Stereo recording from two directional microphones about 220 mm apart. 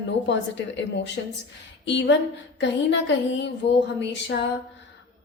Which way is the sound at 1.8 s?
55° left (ahead or behind).